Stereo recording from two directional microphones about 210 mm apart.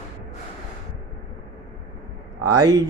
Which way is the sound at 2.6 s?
20° right (ahead or behind).